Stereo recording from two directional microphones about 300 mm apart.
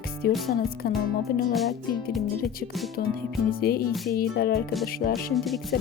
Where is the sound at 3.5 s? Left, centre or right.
Left.